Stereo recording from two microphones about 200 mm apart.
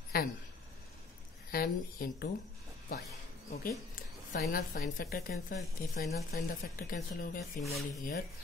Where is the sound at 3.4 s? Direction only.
50° left (ahead or behind).